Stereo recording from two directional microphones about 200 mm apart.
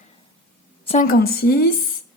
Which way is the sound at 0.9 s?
40° left (ahead or behind).